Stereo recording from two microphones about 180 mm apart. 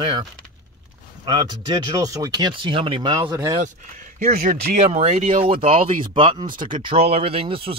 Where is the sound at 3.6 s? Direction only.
50° right (ahead or behind).